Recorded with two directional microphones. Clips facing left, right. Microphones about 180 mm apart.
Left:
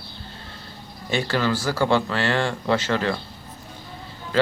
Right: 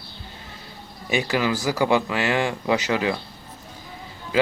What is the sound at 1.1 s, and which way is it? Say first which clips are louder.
Speech: even; 15° right (ahead or behind).